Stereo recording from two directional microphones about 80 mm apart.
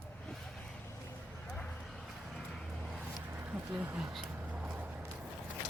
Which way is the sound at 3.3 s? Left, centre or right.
Right.